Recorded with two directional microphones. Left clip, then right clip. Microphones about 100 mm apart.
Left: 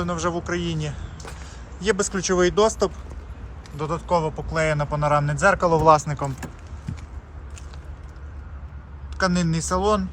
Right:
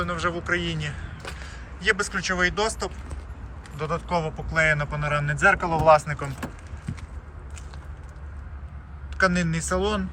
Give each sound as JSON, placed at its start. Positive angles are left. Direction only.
{"t": 0.0, "sound": "a man's voice", "side_deg": 30}
{"t": 1.5, "sound": "speech", "side_deg": 50}
{"t": 3.8, "sound": "a man's voice", "side_deg": 40}
{"t": 5.5, "sound": "speech", "side_deg": 85}
{"t": 9.1, "sound": "a man's voice", "side_deg": 35}